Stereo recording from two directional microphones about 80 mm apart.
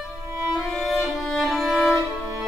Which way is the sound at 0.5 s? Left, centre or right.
Centre.